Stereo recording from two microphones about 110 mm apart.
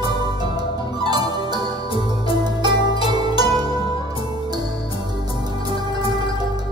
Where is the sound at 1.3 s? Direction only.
40° right (ahead or behind).